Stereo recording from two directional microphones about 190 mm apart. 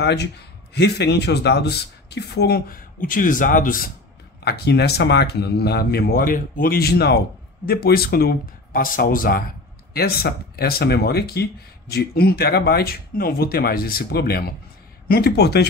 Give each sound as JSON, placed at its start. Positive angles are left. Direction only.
{"t": 0.0, "sound": "speech", "side_deg": 60}
{"t": 4.5, "sound": "speech", "side_deg": 60}